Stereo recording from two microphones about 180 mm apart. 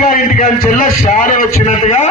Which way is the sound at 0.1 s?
45° left (ahead or behind).